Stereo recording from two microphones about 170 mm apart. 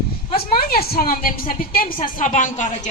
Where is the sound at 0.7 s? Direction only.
60° left (ahead or behind).